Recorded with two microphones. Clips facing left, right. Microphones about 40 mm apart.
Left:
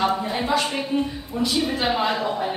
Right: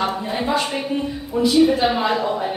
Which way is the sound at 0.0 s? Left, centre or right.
Centre.